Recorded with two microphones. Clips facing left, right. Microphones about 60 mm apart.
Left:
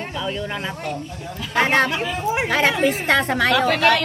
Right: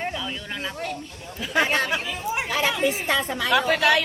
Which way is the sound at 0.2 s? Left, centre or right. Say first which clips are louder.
Left 5 dB; centre.